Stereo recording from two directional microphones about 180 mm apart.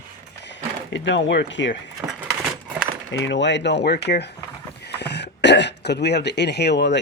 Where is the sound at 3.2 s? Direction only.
85° left.